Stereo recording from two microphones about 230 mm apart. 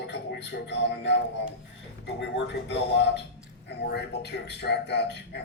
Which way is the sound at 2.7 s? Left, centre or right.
Left.